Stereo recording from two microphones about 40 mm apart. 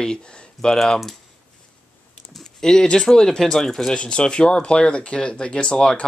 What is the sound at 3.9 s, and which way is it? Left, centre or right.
Speech, left.